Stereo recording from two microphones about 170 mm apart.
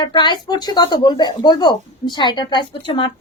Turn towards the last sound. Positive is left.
turn(degrees=30)  # may be behind; listen again after turning